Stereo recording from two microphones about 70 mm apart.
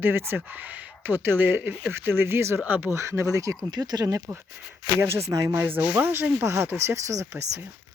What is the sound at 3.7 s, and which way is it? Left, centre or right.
Speech, right.